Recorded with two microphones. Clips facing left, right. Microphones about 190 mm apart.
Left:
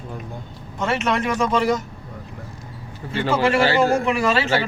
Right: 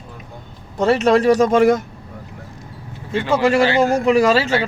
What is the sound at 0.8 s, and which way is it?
A man's voice, 35° right (ahead or behind).